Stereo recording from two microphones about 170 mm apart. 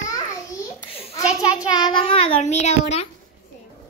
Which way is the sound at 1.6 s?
25° left (ahead or behind).